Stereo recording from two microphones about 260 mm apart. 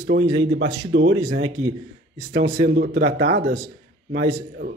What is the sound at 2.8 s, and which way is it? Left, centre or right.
Speech, right.